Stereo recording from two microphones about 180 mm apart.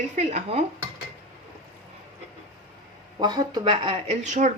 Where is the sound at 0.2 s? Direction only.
40° right (ahead or behind).